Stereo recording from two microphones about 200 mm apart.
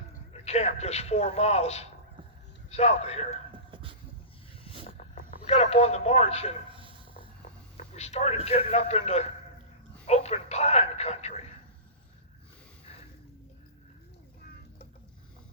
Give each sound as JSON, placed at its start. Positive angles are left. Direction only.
{"t": 0.4, "sound": "a man's voice", "side_deg": 30}
{"t": 5.5, "sound": "a man's voice", "side_deg": 30}
{"t": 7.9, "sound": "a man's voice", "side_deg": 35}